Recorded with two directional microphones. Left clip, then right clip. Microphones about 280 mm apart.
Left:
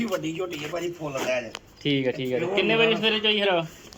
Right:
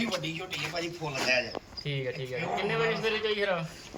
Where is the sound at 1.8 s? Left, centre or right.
Left.